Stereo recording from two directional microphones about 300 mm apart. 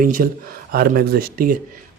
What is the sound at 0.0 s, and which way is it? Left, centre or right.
Speech, right.